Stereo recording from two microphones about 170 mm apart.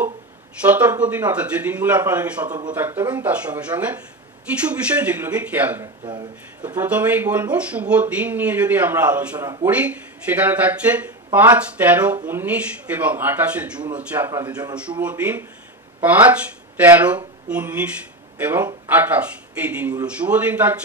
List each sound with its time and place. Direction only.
0.7 s a man's voice: 10° right (ahead or behind)
6.0 s speech: 25° right (ahead or behind)
6.8 s a man's voice: 10° right (ahead or behind)